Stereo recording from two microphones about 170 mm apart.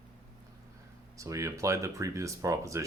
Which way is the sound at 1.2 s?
20° right (ahead or behind).